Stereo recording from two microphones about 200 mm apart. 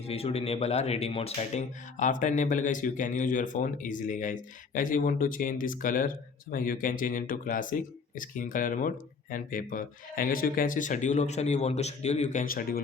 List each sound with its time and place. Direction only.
0.1 s speech: 30° left (ahead or behind); by 12.8 s 45° left (ahead or behind)